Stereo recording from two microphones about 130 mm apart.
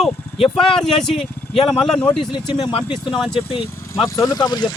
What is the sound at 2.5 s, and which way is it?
Speech, 45° left (ahead or behind).